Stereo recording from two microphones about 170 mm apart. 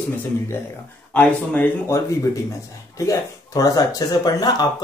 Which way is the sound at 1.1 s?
10° left (ahead or behind).